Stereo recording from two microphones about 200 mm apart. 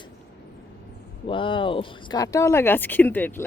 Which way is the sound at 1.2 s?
25° left (ahead or behind).